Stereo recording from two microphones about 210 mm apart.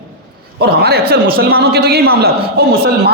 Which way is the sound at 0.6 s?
50° right (ahead or behind).